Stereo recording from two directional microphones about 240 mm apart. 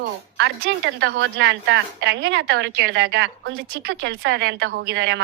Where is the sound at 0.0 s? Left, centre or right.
Right.